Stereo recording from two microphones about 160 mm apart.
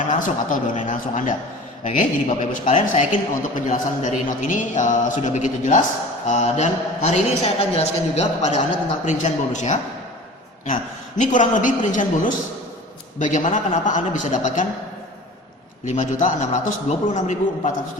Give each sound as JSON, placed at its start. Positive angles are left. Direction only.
{"t": 0.1, "sound": "a man's voice", "side_deg": 50}
{"t": 11.2, "sound": "a man's voice", "side_deg": 50}
{"t": 15.9, "sound": "a man's voice", "side_deg": 50}